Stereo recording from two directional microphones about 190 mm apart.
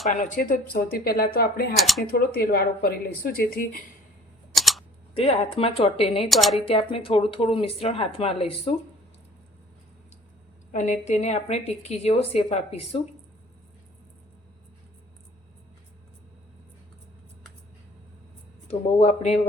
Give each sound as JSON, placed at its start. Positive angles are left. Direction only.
{"t": 0.1, "sound": "speech", "side_deg": 40}
{"t": 1.7, "sound": "speech", "side_deg": 0}
{"t": 2.0, "sound": "speech", "side_deg": 50}
{"t": 4.5, "sound": "camera", "side_deg": 0}
{"t": 5.1, "sound": "speech", "side_deg": 30}
{"t": 6.2, "sound": "speech", "side_deg": 0}
{"t": 6.7, "sound": "speech", "side_deg": 30}
{"t": 10.7, "sound": "a woman's voice", "side_deg": 40}
{"t": 18.7, "sound": "a woman's voice", "side_deg": 35}